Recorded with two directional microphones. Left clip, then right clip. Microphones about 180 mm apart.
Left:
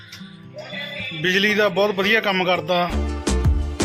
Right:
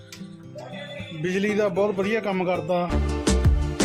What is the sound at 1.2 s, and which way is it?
A man's voice, 5° right (ahead or behind).